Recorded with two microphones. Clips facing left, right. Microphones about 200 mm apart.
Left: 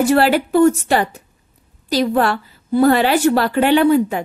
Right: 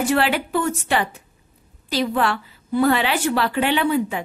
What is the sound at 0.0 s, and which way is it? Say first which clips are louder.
A woman's voice: left 6 dB; 40° left (ahead or behind).